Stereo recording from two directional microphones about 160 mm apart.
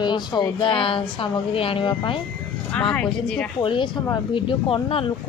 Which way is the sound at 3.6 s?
30° left (ahead or behind).